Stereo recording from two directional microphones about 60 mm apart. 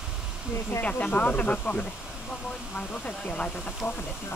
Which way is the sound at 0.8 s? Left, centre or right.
Left.